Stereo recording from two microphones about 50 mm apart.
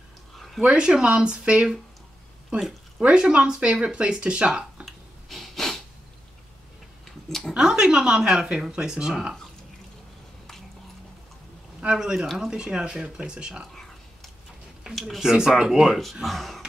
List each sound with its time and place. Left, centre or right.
0.6 s speech: centre
4.8 s a sound: centre
7.2 s speech: centre
7.5 s speech: centre
11.8 s speech: centre
15.0 s speech: centre
15.9 s speech: centre